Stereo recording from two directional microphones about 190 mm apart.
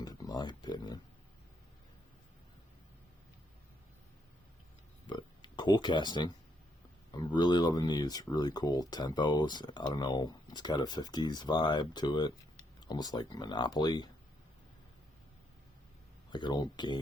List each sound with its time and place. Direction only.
0.0 s a sound: 20° left (ahead or behind)
5.0 s oink: 25° left (ahead or behind)
7.1 s speech: 20° left (ahead or behind)
16.3 s speech: 20° left (ahead or behind)